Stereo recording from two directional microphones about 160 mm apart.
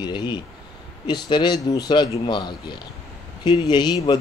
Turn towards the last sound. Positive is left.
turn(degrees=25)  # may be behind; listen again after turning